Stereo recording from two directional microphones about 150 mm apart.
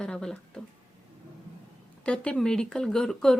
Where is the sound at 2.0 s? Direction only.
10° left (ahead or behind).